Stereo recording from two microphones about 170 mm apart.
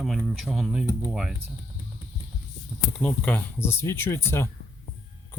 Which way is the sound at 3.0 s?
10° left (ahead or behind).